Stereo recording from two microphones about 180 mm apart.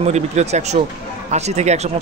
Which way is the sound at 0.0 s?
40° right (ahead or behind).